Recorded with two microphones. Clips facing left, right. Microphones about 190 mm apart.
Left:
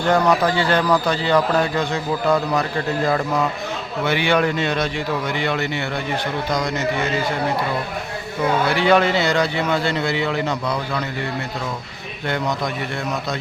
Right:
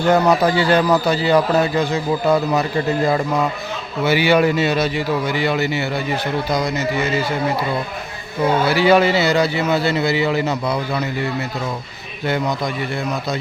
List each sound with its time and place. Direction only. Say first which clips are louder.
0.1 s speech: right 2 dB; 10° right (ahead or behind)
4.0 s a man's voice: right 4 dB; 5° right (ahead or behind)
8.6 s a man's voice: right 3 dB; 5° right (ahead or behind)
12.2 s a man's voice: right 2 dB; 5° right (ahead or behind)